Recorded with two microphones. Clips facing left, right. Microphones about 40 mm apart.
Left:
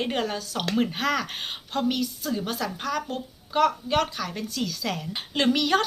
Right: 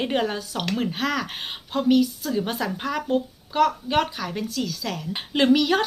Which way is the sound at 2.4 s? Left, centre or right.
Centre.